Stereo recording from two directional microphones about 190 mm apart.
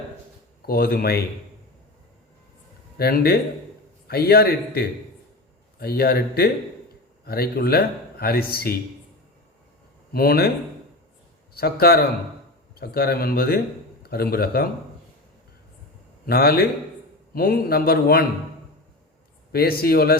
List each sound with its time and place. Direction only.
0.6 s speech: 55° left (ahead or behind)
3.0 s a man's voice: 55° left (ahead or behind)
10.1 s speech: 50° left (ahead or behind)
11.5 s a man's voice: 55° left (ahead or behind)
16.2 s a man's voice: 55° left (ahead or behind)
19.5 s speech: 55° left (ahead or behind)